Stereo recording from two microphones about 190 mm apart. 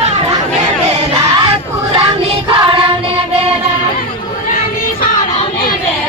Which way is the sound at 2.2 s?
25° right (ahead or behind).